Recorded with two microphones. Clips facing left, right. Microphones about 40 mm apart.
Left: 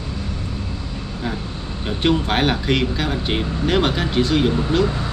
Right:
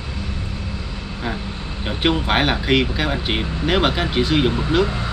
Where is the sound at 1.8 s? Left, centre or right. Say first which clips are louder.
Even; centre.